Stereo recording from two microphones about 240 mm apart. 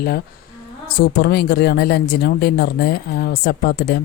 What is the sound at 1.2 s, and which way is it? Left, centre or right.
Speech, left.